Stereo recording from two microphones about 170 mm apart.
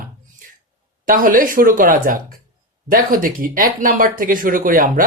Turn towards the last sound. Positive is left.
turn(degrees=-55)  # may be behind; listen again after turning